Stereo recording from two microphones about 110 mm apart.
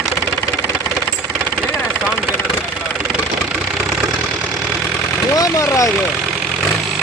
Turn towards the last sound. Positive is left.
turn(degrees=30)  # may be behind; listen again after turning